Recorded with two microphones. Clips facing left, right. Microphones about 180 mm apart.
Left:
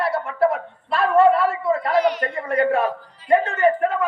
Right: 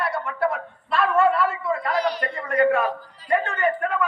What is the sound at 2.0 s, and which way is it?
Speech, 35° right (ahead or behind).